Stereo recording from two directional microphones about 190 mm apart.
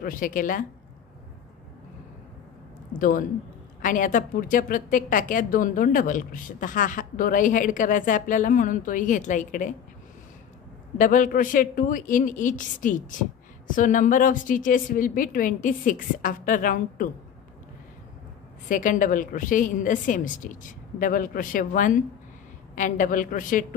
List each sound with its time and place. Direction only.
0.0 s a woman's voice: 45° left (ahead or behind)
2.9 s a man's voice: 45° left (ahead or behind)
11.0 s a woman's voice: 45° left (ahead or behind)
18.7 s a woman's voice: 45° left (ahead or behind)